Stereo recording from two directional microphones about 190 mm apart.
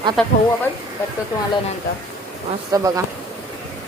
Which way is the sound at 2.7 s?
15° right (ahead or behind).